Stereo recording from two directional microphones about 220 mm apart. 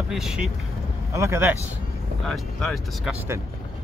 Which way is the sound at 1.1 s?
10° right (ahead or behind).